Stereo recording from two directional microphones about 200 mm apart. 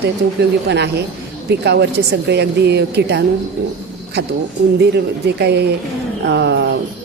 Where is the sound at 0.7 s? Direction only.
60° right (ahead or behind).